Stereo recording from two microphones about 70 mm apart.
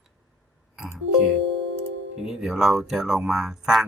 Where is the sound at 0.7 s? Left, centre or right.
Centre.